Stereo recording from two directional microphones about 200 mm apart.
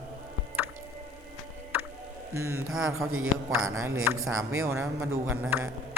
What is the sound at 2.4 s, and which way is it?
Speech, 90° right.